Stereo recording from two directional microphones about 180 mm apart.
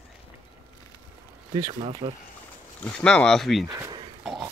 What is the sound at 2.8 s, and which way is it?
Speech, 5° left (ahead or behind).